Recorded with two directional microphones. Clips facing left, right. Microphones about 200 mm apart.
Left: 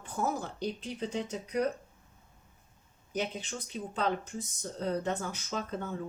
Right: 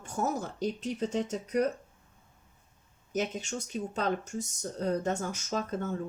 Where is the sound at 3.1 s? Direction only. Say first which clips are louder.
Right 3 dB; 45° right (ahead or behind).